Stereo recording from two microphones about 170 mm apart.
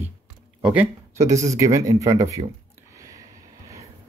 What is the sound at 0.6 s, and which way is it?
Speech, 10° right (ahead or behind).